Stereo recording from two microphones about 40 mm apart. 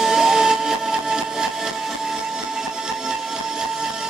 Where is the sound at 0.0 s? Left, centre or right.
Centre.